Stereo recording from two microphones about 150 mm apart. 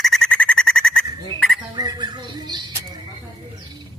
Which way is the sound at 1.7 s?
30° right (ahead or behind).